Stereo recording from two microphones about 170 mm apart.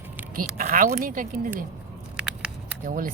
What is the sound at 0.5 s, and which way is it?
Speech, 50° right (ahead or behind).